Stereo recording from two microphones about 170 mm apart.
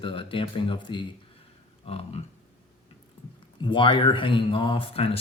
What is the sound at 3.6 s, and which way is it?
Speech, 30° left (ahead or behind).